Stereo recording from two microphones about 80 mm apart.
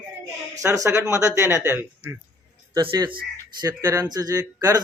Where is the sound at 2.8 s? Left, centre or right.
Right.